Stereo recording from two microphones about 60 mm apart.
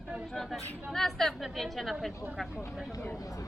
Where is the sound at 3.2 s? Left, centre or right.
Left.